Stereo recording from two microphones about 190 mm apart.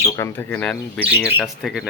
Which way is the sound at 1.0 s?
10° right (ahead or behind).